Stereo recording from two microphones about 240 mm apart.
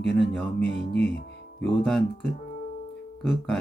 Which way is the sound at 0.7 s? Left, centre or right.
Left.